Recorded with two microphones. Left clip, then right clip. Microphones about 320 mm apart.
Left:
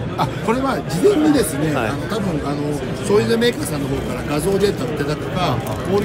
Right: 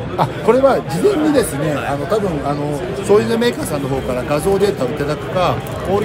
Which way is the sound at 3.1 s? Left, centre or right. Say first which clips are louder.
Right 2 dB; centre.